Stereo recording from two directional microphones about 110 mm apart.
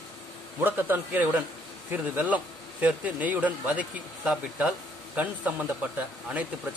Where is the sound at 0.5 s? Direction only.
20° right (ahead or behind).